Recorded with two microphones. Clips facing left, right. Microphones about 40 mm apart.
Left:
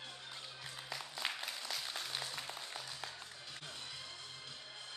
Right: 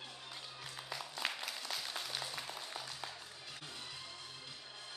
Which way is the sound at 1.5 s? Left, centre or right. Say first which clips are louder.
Even; centre.